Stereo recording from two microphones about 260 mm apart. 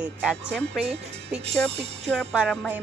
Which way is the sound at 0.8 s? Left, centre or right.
Right.